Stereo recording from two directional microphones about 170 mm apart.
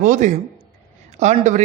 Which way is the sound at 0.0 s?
50° right (ahead or behind).